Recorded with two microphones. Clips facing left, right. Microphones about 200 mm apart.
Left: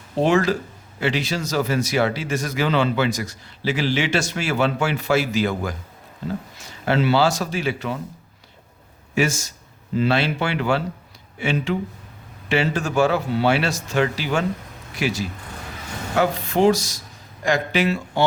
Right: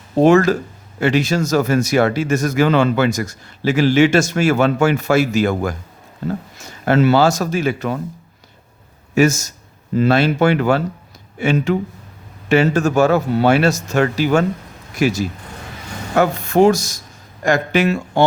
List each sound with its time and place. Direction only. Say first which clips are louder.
0.2 s speech: right 7 dB; 45° right (ahead or behind)
9.1 s speech: right 7 dB; 45° right (ahead or behind)